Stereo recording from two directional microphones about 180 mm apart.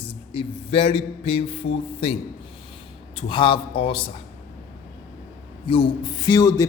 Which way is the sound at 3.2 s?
30° left (ahead or behind).